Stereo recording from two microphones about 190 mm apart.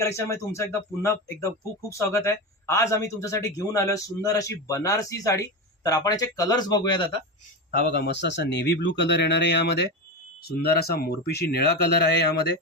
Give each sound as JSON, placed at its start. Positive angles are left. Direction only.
{"t": 0.3, "sound": "speech", "side_deg": 15}
{"t": 7.7, "sound": "speech", "side_deg": 55}